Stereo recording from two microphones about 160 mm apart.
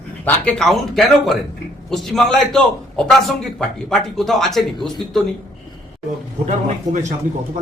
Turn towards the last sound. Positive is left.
turn(degrees=-45)  # may be behind; listen again after turning